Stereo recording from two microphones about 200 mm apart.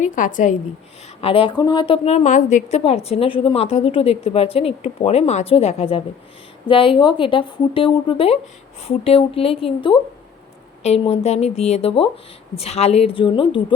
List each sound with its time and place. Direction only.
0.0 s speech: 40° left (ahead or behind)
1.2 s a woman's voice: 25° left (ahead or behind)